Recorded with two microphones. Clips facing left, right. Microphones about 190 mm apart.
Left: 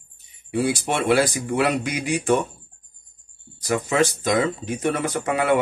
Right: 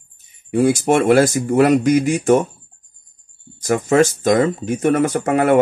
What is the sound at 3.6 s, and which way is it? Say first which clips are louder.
Speech: right 6 dB; 50° right (ahead or behind).